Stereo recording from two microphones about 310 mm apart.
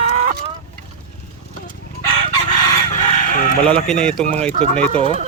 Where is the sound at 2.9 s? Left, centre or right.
Left.